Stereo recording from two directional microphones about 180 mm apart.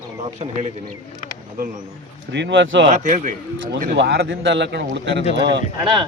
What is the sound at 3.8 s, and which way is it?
Speech, 60° right (ahead or behind).